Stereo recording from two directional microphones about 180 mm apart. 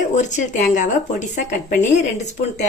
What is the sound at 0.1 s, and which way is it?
Speech, 40° left (ahead or behind).